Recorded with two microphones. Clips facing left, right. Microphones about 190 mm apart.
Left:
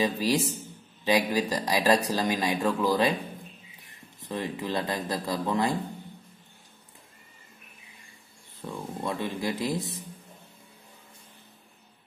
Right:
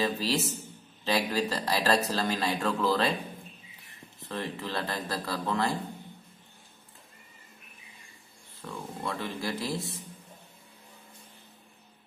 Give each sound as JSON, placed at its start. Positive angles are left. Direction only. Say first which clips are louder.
{"t": 0.0, "sound": "speech", "louder": "left 3 dB", "side_deg": 15}
{"t": 4.2, "sound": "speech", "louder": "left 3 dB", "side_deg": 15}
{"t": 8.6, "sound": "speech", "louder": "left 3 dB", "side_deg": 15}